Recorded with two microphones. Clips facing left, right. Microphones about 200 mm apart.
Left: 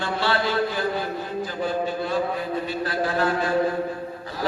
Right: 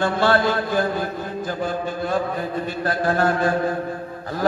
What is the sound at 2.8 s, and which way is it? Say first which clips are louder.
Speech: right 5 dB; 50° right (ahead or behind).